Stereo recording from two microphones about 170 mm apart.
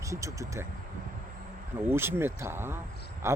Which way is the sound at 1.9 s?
15° right (ahead or behind).